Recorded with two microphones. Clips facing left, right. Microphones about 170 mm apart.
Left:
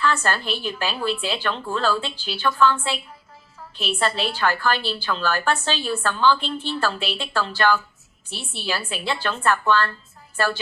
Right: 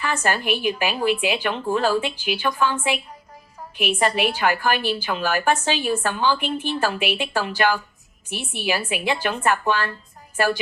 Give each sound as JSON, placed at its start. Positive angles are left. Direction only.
{"t": 0.0, "sound": "a woman's voice", "side_deg": -15}